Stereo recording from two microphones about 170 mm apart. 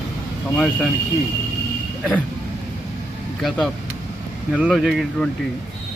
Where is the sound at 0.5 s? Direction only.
Centre (ahead or behind).